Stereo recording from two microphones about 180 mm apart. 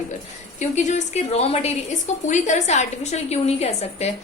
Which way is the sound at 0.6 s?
40° left (ahead or behind).